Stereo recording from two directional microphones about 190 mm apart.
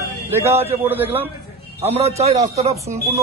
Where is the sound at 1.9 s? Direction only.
35° right (ahead or behind).